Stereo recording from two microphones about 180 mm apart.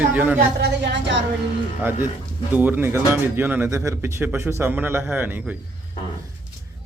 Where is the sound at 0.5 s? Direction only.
70° right (ahead or behind).